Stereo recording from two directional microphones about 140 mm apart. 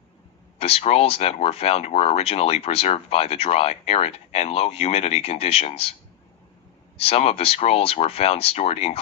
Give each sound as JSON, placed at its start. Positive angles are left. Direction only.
{"t": 0.6, "sound": "speech", "side_deg": 45}
{"t": 7.0, "sound": "speech", "side_deg": 45}